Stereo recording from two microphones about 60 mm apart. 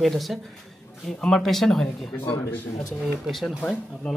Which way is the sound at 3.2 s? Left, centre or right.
Centre.